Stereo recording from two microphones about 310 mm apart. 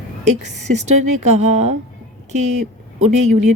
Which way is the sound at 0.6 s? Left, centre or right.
Right.